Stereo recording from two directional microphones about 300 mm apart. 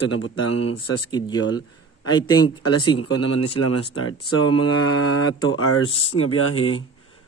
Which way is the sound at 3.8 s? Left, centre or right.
Left.